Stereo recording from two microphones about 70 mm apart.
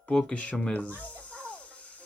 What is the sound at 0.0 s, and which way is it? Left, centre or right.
Speech, centre.